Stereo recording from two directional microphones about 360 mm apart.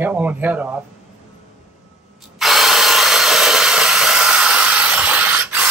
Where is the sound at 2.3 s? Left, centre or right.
Centre.